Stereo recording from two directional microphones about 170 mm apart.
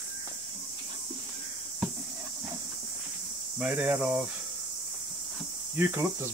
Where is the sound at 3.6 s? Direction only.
10° right (ahead or behind).